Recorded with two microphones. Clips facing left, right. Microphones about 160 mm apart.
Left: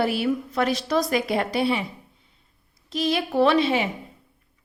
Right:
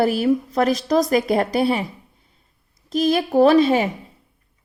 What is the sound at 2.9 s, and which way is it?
Speech, 45° right (ahead or behind).